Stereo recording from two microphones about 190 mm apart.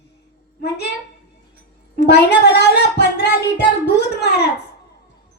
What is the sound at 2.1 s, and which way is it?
Speech, 60° left (ahead or behind).